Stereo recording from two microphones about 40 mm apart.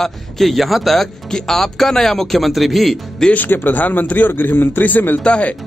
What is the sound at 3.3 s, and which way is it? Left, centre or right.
Speech, left.